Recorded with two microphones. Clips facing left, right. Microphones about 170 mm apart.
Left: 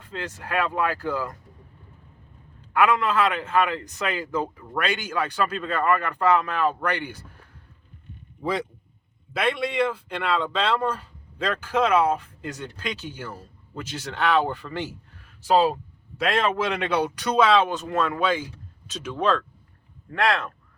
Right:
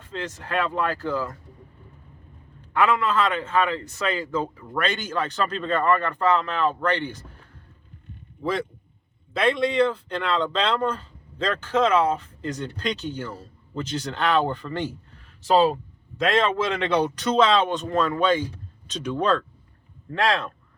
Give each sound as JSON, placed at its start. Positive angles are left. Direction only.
{"t": 0.0, "sound": "speech", "side_deg": 10}
{"t": 2.7, "sound": "speech", "side_deg": 10}
{"t": 8.4, "sound": "a man's voice", "side_deg": 15}
{"t": 16.1, "sound": "speech", "side_deg": 10}